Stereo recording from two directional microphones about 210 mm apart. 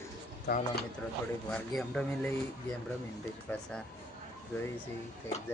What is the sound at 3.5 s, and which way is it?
Speech, 5° left (ahead or behind).